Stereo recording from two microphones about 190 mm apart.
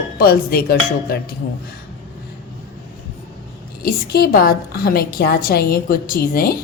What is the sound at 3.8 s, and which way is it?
A woman's voice, 55° left (ahead or behind).